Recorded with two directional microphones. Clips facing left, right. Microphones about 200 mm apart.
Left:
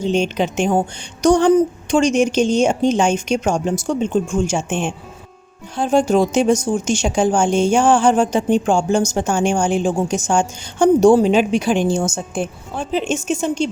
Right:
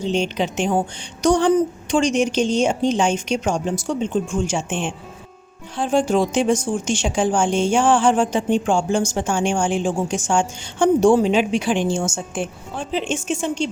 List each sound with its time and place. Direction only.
0.0 s a woman's voice: 50° left (ahead or behind)